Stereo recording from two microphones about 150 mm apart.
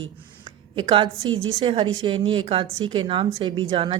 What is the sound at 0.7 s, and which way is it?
A woman's voice, 30° right (ahead or behind).